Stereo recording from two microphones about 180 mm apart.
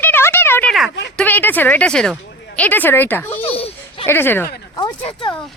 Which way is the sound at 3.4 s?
30° left (ahead or behind).